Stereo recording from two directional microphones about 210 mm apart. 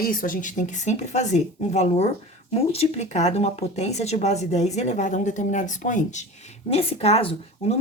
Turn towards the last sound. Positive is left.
turn(degrees=30)  # may be behind; listen again after turning